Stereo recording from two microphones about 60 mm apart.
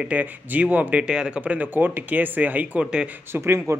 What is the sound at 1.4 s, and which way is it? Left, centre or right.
Speech, right.